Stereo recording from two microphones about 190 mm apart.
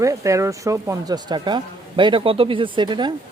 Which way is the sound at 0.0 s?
15° right (ahead or behind).